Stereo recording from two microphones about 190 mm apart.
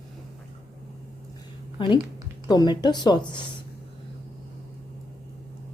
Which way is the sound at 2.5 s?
20° left (ahead or behind).